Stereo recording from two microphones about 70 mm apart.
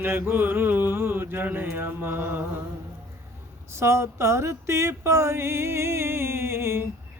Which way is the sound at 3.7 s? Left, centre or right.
Right.